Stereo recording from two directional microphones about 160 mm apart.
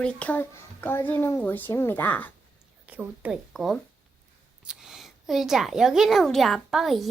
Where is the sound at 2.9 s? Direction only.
10° right (ahead or behind).